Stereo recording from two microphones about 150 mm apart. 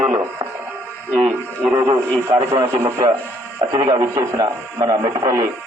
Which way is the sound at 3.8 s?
25° right (ahead or behind).